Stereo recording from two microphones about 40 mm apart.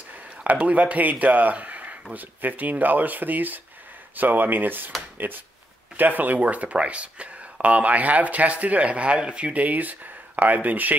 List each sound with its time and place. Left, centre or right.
0.4 s speech: right
2.1 s speech: right